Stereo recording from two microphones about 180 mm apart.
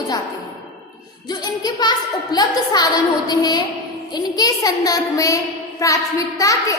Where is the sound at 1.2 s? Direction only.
20° left (ahead or behind).